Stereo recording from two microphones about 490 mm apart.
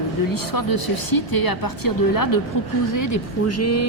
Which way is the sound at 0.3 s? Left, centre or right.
Left.